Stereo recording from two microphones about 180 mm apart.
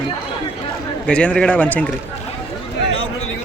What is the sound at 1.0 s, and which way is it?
Speech, 5° left (ahead or behind).